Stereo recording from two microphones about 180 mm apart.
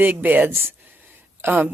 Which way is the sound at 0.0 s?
10° right (ahead or behind).